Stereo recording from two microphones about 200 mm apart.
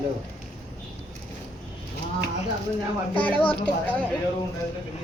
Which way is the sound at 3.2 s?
5° left (ahead or behind).